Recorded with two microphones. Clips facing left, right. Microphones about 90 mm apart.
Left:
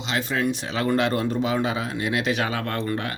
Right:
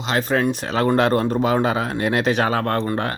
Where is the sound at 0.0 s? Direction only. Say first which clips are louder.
Right 5 dB; 45° right (ahead or behind).